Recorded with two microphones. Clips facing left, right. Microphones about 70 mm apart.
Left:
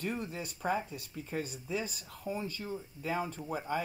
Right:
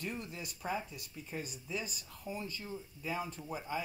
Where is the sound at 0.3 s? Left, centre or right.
Left.